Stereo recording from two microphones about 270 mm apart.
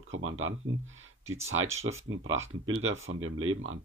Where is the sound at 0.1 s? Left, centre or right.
Right.